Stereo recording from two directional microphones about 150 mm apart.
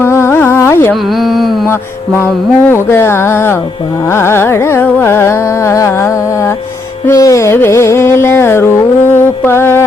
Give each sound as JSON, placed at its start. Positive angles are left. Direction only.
{"t": 0.0, "sound": "carnatic music", "side_deg": 15}
{"t": 1.2, "sound": "mantra", "side_deg": 0}
{"t": 2.1, "sound": "carnatic music", "side_deg": 15}